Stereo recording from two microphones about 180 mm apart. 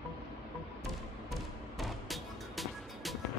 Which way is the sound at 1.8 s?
Centre (ahead or behind).